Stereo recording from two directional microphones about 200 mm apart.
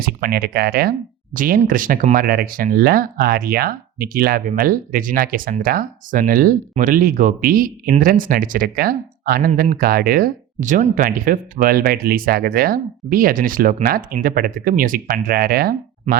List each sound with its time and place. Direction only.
0.0 s speech: 50° right (ahead or behind)